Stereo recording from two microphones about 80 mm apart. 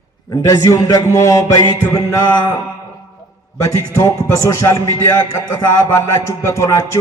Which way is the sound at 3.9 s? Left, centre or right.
Left.